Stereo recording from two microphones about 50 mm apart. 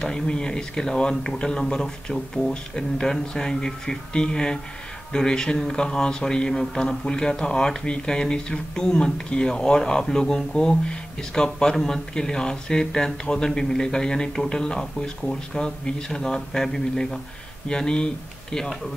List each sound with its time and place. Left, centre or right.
0.0 s speech: centre